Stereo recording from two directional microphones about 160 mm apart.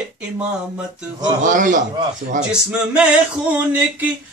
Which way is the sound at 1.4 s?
55° right (ahead or behind).